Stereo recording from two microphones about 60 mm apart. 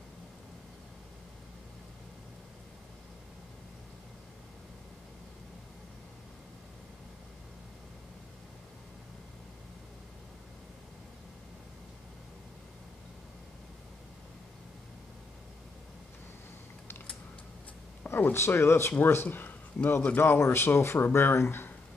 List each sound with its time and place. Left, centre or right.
18.0 s speech: left
20.2 s speech: left